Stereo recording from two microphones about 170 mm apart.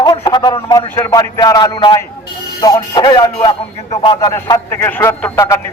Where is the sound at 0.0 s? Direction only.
25° left (ahead or behind).